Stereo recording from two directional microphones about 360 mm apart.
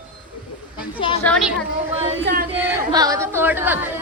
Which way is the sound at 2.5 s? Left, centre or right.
Centre.